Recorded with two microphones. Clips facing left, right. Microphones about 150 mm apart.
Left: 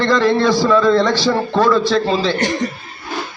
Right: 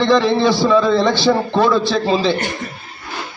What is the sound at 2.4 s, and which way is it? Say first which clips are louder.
Speech: left 6 dB; 40° left (ahead or behind).